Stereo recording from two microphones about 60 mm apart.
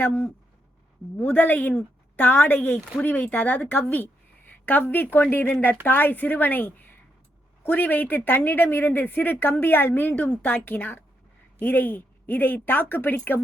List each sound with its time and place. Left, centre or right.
0.0 s speech: left
2.6 s a woman's voice: left